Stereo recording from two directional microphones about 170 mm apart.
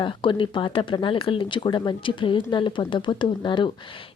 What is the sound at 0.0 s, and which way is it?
Speech, 30° left (ahead or behind).